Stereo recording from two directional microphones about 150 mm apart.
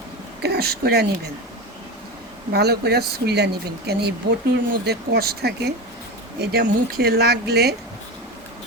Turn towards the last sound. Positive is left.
turn(degrees=-90)